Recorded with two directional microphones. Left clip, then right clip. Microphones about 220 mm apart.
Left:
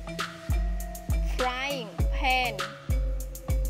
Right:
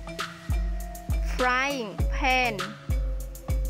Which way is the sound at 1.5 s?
15° right (ahead or behind).